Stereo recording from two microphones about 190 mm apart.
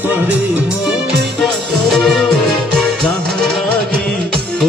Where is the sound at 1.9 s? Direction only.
Centre (ahead or behind).